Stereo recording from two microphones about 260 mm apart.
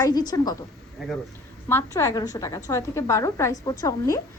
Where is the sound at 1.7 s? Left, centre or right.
Centre.